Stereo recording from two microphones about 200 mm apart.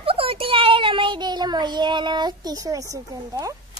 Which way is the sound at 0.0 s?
30° right (ahead or behind).